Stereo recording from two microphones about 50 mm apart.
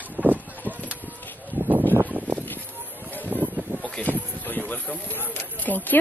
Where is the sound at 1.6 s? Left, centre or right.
Right.